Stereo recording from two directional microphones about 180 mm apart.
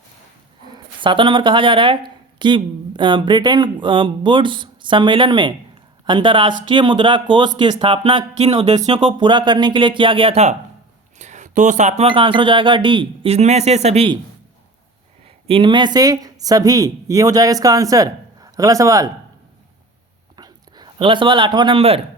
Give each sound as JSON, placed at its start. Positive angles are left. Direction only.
{"t": 1.0, "sound": "speech", "side_deg": -25}
{"t": 8.6, "sound": "speech", "side_deg": -40}
{"t": 9.1, "sound": "speech", "side_deg": -25}
{"t": 15.4, "sound": "speech", "side_deg": -30}
{"t": 20.3, "sound": "a sound", "side_deg": -25}